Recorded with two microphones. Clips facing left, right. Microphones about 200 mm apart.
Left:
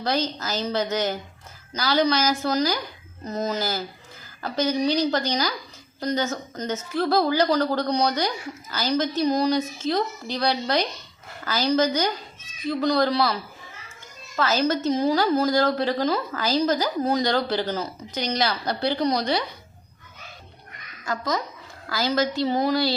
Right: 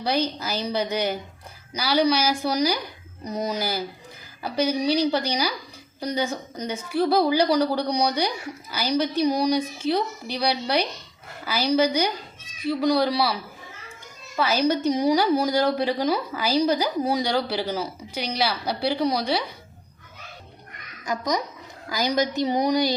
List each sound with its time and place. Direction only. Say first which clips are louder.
0.0 s a woman's voice: right 1 dB; 10° right (ahead or behind)
21.0 s a woman's voice: right 1 dB; 15° right (ahead or behind)